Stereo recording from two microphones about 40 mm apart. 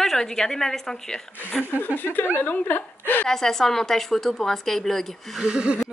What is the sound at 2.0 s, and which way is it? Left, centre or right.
Speech, left.